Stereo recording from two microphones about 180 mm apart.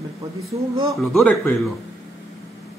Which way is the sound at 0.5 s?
20° right (ahead or behind).